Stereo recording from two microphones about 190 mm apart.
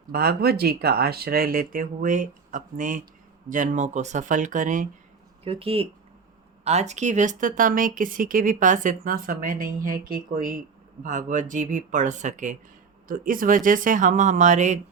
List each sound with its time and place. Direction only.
0.1 s speech: 55° right (ahead or behind)
5.5 s speech: 30° right (ahead or behind)